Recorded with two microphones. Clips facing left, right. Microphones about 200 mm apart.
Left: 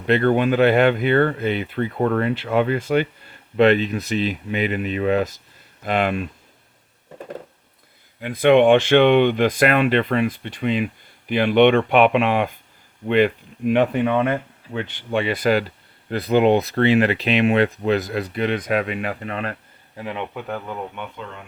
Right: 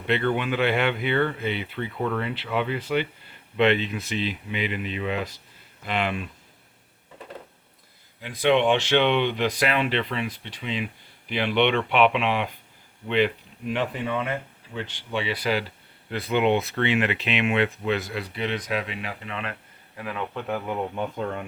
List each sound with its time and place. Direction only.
0.1 s speech: 45° left (ahead or behind)
8.2 s speech: 55° left (ahead or behind)
20.0 s speech: 25° left (ahead or behind)
20.9 s speech: 35° right (ahead or behind)